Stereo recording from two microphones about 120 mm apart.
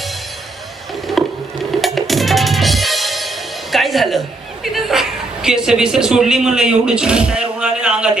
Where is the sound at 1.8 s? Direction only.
Centre (ahead or behind).